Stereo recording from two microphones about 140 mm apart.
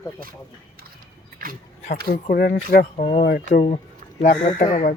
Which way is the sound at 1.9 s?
90° left.